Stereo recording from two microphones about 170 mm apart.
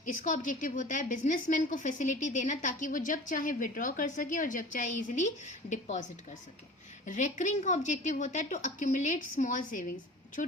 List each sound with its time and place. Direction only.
0.0 s a woman's voice: 50° left (ahead or behind)